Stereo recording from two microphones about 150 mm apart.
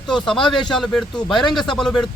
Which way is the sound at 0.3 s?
5° left (ahead or behind).